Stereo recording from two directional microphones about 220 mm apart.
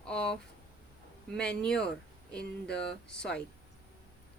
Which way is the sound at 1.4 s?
5° left (ahead or behind).